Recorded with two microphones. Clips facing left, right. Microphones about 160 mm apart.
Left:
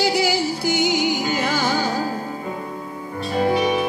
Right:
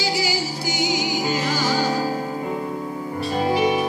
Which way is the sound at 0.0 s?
55° left (ahead or behind).